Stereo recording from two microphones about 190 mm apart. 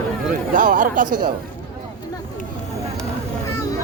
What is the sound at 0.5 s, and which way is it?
Speech, 45° right (ahead or behind).